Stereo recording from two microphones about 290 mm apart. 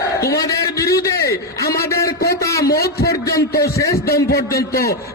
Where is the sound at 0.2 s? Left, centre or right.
Centre.